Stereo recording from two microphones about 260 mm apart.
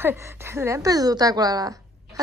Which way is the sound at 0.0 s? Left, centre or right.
Centre.